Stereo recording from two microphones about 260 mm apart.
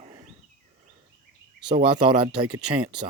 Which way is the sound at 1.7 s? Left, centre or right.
Centre.